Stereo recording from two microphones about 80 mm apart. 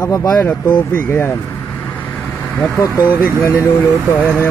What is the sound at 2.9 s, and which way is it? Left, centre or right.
Speech, right.